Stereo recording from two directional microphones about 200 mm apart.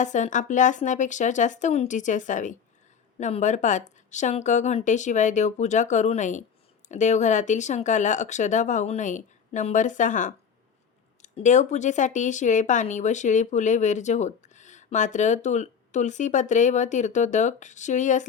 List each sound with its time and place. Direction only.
0.0 s speech: 40° left (ahead or behind)